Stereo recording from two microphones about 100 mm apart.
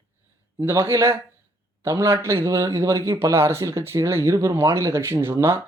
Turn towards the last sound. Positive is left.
turn(degrees=-25)  # may be behind; listen again after turning